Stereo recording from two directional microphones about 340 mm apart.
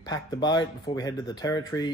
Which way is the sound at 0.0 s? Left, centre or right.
Centre.